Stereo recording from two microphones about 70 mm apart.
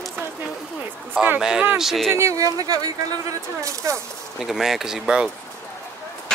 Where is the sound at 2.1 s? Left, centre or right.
Right.